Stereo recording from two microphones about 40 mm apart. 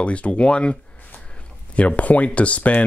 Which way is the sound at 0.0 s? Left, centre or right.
Left.